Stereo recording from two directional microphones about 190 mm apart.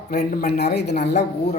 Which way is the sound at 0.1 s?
55° left (ahead or behind).